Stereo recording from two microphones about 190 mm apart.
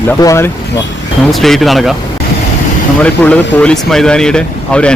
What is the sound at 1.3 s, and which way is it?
Speech, centre (ahead or behind).